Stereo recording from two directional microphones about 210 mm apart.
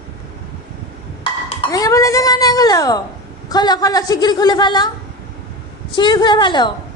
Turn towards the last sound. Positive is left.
turn(degrees=20)  # may be behind; listen again after turning